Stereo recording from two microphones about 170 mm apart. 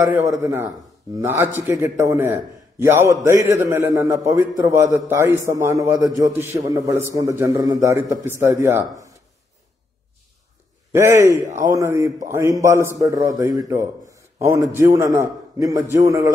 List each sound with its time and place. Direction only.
0.3 s a man's voice: 15° right (ahead or behind)
10.9 s a man's voice: 15° right (ahead or behind)